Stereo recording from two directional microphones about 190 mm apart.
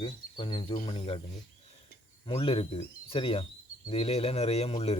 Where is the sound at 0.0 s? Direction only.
25° left (ahead or behind).